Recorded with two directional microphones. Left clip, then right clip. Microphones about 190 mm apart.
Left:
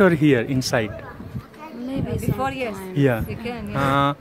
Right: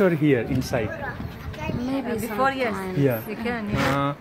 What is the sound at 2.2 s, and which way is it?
Speech, 30° left (ahead or behind).